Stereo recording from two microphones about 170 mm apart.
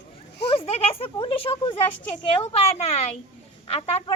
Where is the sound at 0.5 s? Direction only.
35° left (ahead or behind).